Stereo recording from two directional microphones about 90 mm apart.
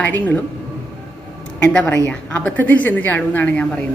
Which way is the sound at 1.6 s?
10° left (ahead or behind).